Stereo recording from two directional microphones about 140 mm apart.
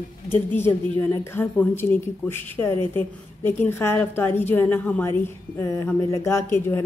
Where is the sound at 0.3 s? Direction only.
15° left (ahead or behind).